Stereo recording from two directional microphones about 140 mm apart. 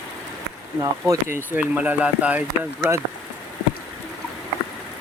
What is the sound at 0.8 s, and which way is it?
Speech, 20° right (ahead or behind).